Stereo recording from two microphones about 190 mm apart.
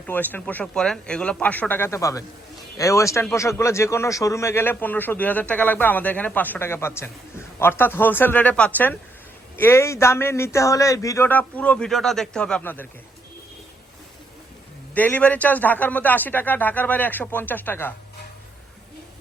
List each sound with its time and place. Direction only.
0.0 s a man's voice: 10° left (ahead or behind)
14.9 s a man's voice: 10° left (ahead or behind)